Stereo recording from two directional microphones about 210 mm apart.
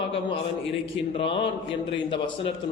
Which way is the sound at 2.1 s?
25° left (ahead or behind).